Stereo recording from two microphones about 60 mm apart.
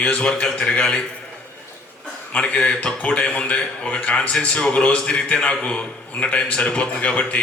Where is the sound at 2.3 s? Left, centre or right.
Left.